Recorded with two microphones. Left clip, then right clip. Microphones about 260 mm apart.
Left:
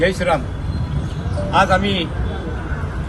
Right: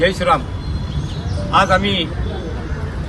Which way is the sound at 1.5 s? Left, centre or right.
Centre.